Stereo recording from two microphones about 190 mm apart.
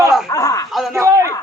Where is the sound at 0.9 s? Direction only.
15° right (ahead or behind).